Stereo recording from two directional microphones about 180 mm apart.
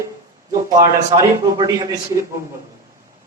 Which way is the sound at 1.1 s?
20° right (ahead or behind).